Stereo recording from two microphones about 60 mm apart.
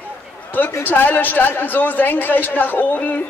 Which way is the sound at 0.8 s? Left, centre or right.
Left.